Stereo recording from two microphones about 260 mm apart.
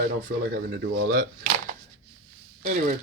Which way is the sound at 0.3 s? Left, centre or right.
Right.